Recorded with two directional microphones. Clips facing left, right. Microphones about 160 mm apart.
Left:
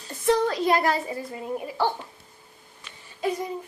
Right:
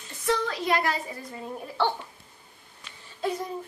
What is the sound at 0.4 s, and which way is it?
Speech, 35° left (ahead or behind).